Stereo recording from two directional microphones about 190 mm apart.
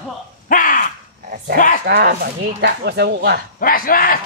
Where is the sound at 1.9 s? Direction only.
55° right (ahead or behind).